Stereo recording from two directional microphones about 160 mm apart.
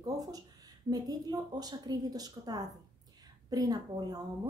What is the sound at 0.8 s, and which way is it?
A woman's voice, 25° right (ahead or behind).